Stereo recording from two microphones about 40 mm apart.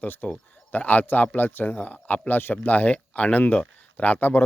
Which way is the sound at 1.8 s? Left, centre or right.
Left.